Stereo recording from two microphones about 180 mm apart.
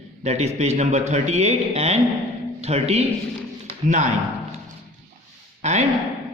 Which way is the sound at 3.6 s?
40° right (ahead or behind).